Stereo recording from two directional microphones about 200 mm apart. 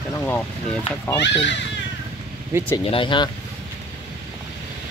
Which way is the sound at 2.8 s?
25° left (ahead or behind).